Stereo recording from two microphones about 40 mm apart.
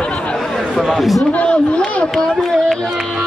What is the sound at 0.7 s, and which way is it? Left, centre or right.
Speech, centre.